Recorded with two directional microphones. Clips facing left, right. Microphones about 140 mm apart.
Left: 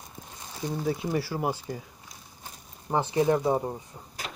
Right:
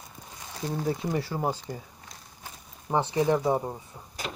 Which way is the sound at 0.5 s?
Centre (ahead or behind).